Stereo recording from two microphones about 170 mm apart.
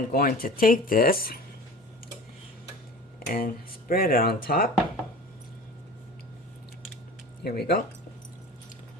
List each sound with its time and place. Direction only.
0.1 s speech: 60° left (ahead or behind)
3.2 s speech: 55° left (ahead or behind)
7.4 s speech: 65° left (ahead or behind)